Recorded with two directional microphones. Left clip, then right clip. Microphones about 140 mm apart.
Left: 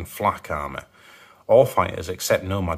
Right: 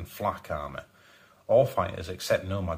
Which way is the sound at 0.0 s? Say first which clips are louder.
Left 8 dB; 45° left (ahead or behind).